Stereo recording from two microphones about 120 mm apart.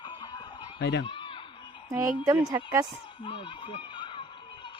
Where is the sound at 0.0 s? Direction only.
40° left (ahead or behind).